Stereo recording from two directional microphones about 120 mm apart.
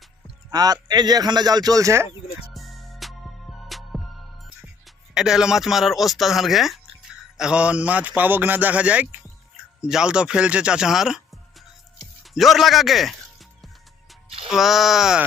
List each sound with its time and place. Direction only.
0.5 s speech: 30° right (ahead or behind)
2.5 s music: centre (ahead or behind)
5.1 s a man's voice: 5° right (ahead or behind)
12.2 s music: centre (ahead or behind)
14.5 s speech: centre (ahead or behind)